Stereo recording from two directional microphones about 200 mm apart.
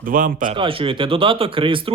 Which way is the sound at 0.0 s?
45° right (ahead or behind).